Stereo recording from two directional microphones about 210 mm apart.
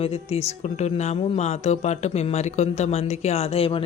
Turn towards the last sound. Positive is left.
turn(degrees=25)  # may be behind; listen again after turning